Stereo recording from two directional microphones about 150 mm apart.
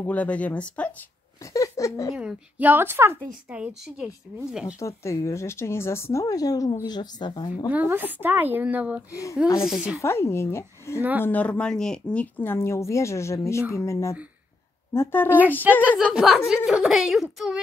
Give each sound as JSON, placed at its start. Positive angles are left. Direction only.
{"t": 0.0, "sound": "speech", "side_deg": 10}
{"t": 1.4, "sound": "speech", "side_deg": 20}
{"t": 2.1, "sound": "a woman's voice", "side_deg": -10}
{"t": 4.7, "sound": "speech", "side_deg": 20}
{"t": 7.7, "sound": "a woman's voice", "side_deg": -10}
{"t": 9.1, "sound": "speech", "side_deg": 20}
{"t": 9.6, "sound": "speech", "side_deg": -5}
{"t": 10.0, "sound": "speech", "side_deg": 15}
{"t": 11.0, "sound": "a woman's voice", "side_deg": -10}
{"t": 11.2, "sound": "speech", "side_deg": 10}
{"t": 15.8, "sound": "speech", "side_deg": -5}